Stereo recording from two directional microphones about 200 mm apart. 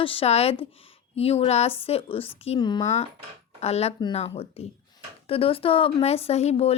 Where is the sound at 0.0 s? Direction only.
25° left (ahead or behind).